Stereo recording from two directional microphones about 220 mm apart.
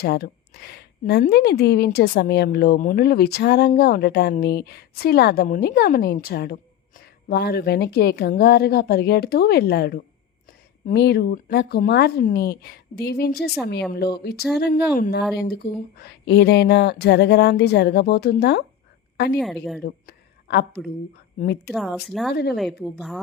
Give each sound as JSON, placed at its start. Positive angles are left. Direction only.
{"t": 0.0, "sound": "a woman's voice", "side_deg": 45}
{"t": 19.4, "sound": "speech", "side_deg": 0}
{"t": 20.1, "sound": "a sound", "side_deg": 50}
{"t": 21.3, "sound": "a woman's voice", "side_deg": 50}
{"t": 21.7, "sound": "speech", "side_deg": 0}
{"t": 22.3, "sound": "a woman's voice", "side_deg": 45}
{"t": 22.8, "sound": "speech", "side_deg": 0}